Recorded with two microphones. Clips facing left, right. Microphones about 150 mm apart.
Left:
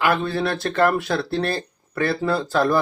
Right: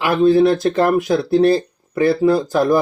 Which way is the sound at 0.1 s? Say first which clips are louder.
Right 10 dB; 20° right (ahead or behind).